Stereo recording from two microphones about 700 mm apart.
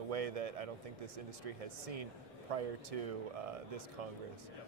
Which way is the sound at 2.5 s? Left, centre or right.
Right.